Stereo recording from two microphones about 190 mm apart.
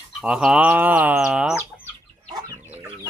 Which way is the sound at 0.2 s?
5° right (ahead or behind).